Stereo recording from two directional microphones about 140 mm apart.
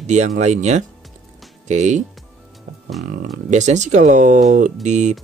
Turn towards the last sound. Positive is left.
turn(degrees=-55)  # may be behind; listen again after turning